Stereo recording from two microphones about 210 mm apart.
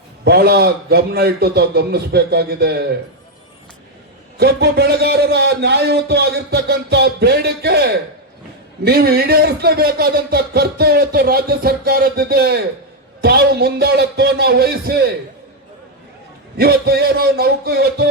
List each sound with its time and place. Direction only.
0.3 s a man's voice: 50° right (ahead or behind)
4.4 s a man's voice: 50° right (ahead or behind)
16.6 s a man's voice: 45° right (ahead or behind)